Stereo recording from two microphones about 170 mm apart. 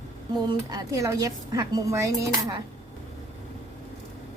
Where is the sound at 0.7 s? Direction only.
20° right (ahead or behind).